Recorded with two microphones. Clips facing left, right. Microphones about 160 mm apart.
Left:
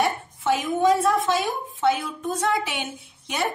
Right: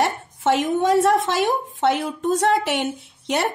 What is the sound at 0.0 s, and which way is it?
A woman's voice, 75° right (ahead or behind).